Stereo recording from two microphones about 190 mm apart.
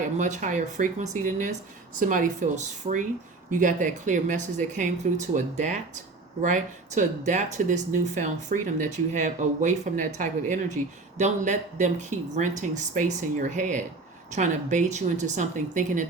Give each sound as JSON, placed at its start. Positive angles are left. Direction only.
{"t": 0.2, "sound": "speech", "side_deg": -40}